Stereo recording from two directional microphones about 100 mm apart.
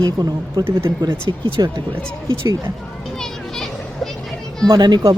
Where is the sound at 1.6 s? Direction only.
45° right (ahead or behind).